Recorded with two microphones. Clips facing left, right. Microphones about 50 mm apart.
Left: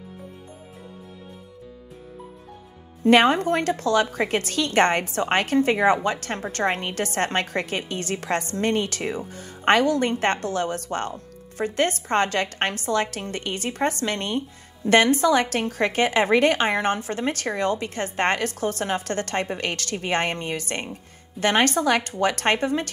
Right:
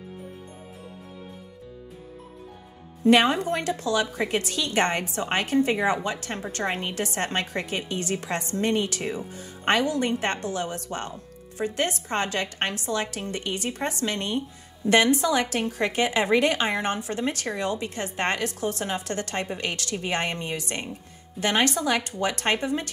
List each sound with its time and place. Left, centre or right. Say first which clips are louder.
3.0 s a woman's voice: left 2 dB; left